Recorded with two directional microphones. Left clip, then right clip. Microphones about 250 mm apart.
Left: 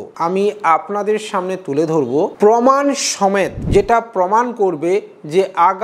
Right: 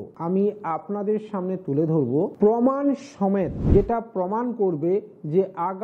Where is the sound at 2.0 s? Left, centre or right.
Left.